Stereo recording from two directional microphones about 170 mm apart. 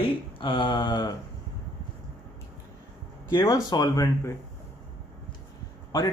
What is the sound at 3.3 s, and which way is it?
A man's voice, 25° left (ahead or behind).